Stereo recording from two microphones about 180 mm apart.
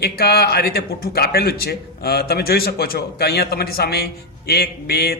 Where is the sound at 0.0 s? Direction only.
60° left (ahead or behind).